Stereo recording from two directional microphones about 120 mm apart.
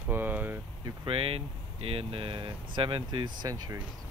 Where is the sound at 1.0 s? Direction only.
50° right (ahead or behind); by 3.8 s 30° right (ahead or behind).